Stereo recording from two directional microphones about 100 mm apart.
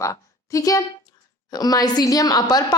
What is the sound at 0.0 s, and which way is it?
A woman's voice, 35° left (ahead or behind).